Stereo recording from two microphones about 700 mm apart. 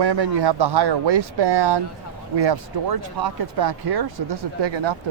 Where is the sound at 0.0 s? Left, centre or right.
Right.